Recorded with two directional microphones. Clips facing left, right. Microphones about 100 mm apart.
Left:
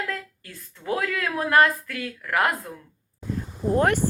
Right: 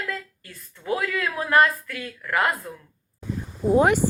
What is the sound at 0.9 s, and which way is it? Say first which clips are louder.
Speech: even; 60° left (ahead or behind).